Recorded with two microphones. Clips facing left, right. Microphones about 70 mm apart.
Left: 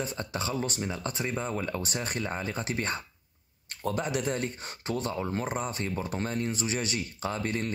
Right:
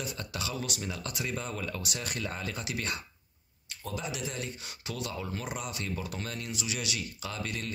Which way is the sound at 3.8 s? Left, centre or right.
Left.